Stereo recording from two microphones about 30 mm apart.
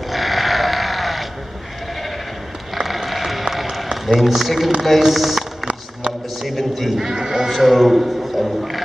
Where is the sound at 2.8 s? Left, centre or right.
Centre.